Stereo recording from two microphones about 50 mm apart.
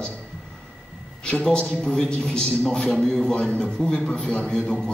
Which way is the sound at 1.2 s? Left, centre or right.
Centre.